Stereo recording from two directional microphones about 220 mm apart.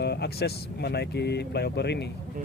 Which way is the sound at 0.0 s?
50° left (ahead or behind).